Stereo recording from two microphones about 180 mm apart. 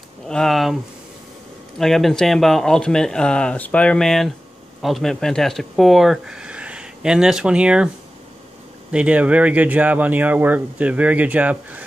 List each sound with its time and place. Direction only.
0.3 s speech: 5° left (ahead or behind)
1.8 s speech: centre (ahead or behind)
8.9 s speech: 5° right (ahead or behind)